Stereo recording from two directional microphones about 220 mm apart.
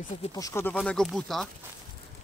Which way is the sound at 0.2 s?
15° left (ahead or behind).